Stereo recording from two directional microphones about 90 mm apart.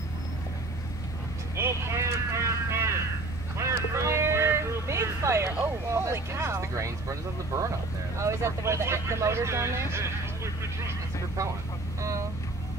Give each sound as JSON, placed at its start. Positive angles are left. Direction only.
{"t": 1.6, "sound": "vehicle", "side_deg": -30}
{"t": 8.2, "sound": "speech", "side_deg": -30}